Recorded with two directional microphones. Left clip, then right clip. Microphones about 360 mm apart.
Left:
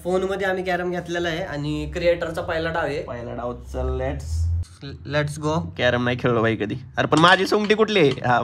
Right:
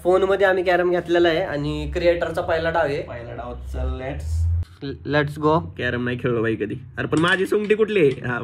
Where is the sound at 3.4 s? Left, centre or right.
Left.